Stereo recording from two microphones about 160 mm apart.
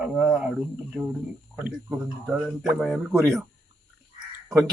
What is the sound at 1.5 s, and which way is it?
Speech, 5° right (ahead or behind).